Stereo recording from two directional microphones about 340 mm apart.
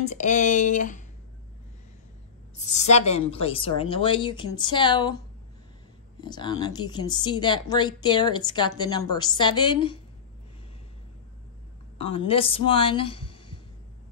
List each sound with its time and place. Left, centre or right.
0.0 s speech: left
2.5 s speech: left
6.2 s speech: centre
12.0 s speech: centre